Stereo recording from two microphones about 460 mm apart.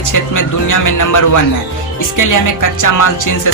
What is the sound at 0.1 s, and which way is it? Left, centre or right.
Music, left.